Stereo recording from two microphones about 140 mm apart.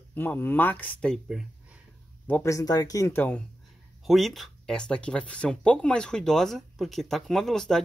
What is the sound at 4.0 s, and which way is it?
Speech, centre (ahead or behind).